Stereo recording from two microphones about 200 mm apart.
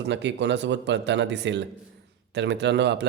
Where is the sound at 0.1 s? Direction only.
60° right (ahead or behind).